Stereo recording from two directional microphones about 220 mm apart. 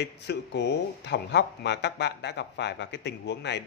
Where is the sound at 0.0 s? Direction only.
50° left (ahead or behind).